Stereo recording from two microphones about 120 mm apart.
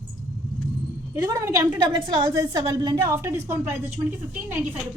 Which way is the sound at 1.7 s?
40° right (ahead or behind).